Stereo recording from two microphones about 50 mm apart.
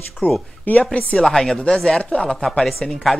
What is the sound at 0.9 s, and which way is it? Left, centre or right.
Speech, left.